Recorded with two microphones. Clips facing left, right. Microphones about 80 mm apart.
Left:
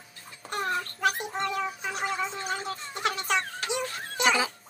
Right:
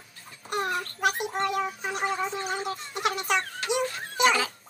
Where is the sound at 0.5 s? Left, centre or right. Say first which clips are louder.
Right 1 dB; centre.